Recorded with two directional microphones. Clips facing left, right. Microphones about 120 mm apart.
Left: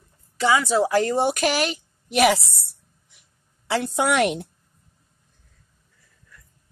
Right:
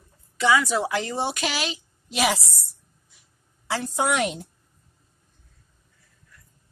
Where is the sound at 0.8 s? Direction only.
45° left (ahead or behind); by 4.5 s 65° left (ahead or behind).